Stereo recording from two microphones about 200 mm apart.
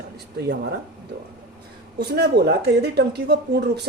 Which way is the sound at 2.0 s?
55° right (ahead or behind).